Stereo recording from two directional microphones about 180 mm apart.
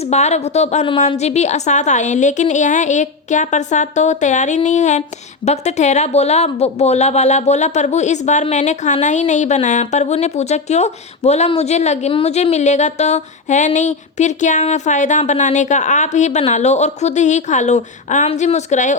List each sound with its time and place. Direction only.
0.0 s a woman's voice: 40° left (ahead or behind)